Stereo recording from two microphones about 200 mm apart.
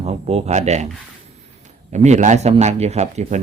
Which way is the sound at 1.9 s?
35° right (ahead or behind).